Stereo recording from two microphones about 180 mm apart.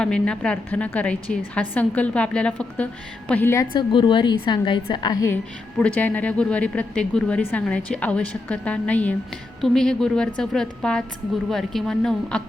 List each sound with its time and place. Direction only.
0.0 s a woman's voice: 5° left (ahead or behind)
3.8 s a woman's voice: 25° left (ahead or behind)
5.8 s a woman's voice: 10° left (ahead or behind)